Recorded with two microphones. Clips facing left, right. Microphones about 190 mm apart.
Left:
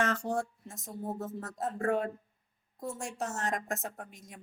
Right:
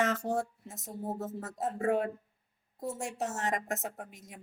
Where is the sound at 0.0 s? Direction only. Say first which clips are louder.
Right 1 dB; 20° right (ahead or behind).